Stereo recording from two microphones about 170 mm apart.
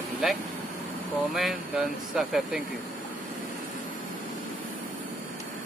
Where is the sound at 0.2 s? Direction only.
Centre (ahead or behind).